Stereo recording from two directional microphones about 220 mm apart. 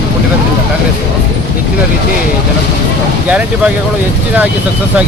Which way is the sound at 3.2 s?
5° right (ahead or behind).